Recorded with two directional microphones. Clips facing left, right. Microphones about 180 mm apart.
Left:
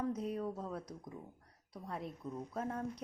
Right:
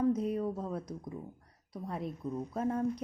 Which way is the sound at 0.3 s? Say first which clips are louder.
Right 5 dB; 25° right (ahead or behind).